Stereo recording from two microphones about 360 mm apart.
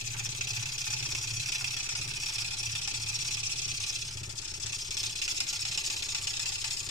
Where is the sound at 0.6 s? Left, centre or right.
Centre.